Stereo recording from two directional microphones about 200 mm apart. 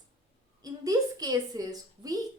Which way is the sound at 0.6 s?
20° right (ahead or behind).